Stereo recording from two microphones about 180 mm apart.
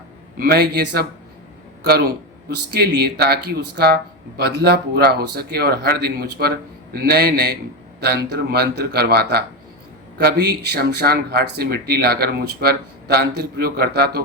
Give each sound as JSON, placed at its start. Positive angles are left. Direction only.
{"t": 0.3, "sound": "a man's voice", "side_deg": -60}